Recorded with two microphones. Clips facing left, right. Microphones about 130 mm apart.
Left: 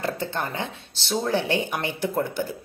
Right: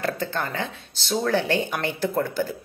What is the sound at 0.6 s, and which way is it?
Speech, 20° left (ahead or behind).